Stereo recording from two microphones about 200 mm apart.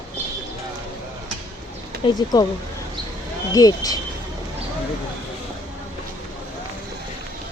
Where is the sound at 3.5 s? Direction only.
20° left (ahead or behind).